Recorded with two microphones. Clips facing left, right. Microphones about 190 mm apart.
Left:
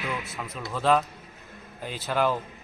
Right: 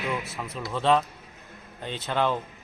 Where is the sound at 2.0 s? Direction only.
5° left (ahead or behind).